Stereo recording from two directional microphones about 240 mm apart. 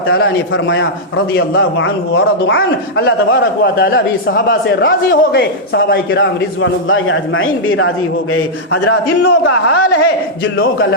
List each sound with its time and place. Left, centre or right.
0.1 s a man's voice: left
8.3 s a man's voice: left